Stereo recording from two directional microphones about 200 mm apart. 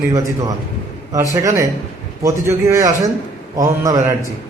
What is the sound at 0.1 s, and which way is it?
A man's voice, 15° right (ahead or behind).